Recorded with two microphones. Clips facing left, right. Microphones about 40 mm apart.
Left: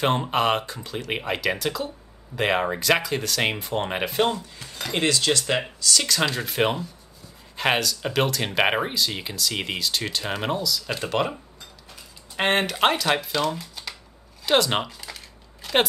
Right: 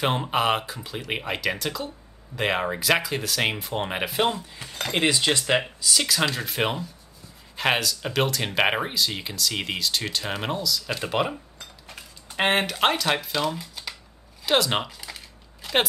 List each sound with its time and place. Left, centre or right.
0.0 s speech: centre
4.8 s speech: centre
12.4 s speech: centre
14.4 s typing: centre